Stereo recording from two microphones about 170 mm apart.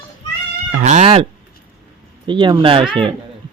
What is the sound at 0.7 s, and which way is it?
Speech, 45° right (ahead or behind).